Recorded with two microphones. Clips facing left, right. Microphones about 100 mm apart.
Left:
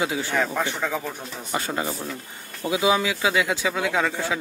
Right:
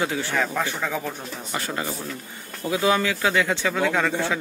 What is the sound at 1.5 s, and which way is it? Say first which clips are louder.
Speech: left 2 dB; 20° left (ahead or behind).